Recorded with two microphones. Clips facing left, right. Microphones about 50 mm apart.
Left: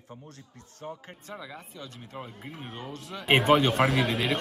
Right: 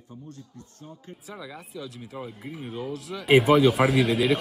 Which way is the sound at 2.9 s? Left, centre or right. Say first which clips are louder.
Right 5 dB; centre.